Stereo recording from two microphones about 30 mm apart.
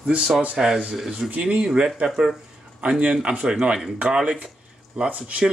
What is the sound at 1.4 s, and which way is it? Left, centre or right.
Speech, right.